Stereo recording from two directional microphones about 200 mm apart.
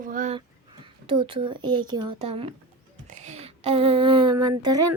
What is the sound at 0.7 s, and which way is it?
Speech, 25° right (ahead or behind).